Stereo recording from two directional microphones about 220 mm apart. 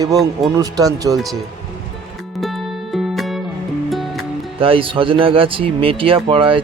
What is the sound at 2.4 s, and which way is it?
Music, centre (ahead or behind).